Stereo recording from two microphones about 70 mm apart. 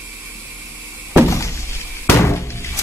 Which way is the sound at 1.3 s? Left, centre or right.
Left.